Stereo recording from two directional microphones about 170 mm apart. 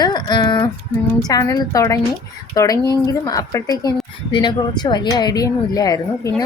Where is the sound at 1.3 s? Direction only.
20° left (ahead or behind).